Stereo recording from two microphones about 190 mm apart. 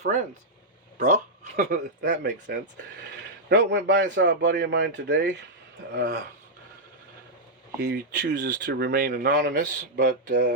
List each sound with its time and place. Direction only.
0.9 s speech: 45° right (ahead or behind)
2.0 s a man's voice: 60° right (ahead or behind)
7.8 s speech: 60° right (ahead or behind)